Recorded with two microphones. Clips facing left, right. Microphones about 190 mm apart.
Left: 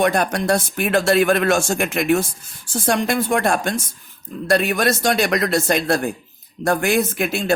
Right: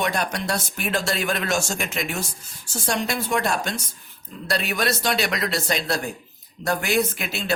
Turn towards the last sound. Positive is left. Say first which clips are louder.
# left 7 dB
turn(degrees=50)  # may be behind; listen again after turning